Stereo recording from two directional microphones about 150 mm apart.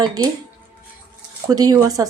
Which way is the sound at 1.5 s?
25° right (ahead or behind).